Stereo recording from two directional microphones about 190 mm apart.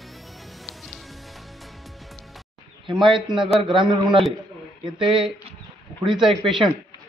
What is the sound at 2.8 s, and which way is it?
A man's voice, 25° right (ahead or behind).